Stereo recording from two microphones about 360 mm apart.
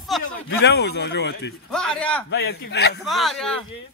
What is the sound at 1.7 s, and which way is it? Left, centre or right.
Speech, centre.